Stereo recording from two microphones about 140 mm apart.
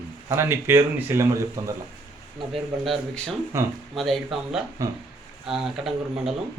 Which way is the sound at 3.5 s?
20° right (ahead or behind).